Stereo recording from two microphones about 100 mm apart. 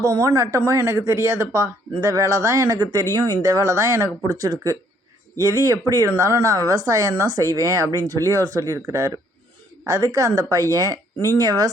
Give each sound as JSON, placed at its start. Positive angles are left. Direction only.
{"t": 0.0, "sound": "speech", "side_deg": -40}